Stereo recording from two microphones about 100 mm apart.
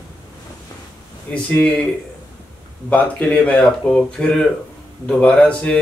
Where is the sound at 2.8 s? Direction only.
15° left (ahead or behind).